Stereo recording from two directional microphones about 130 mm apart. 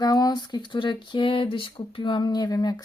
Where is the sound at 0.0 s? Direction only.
30° left (ahead or behind).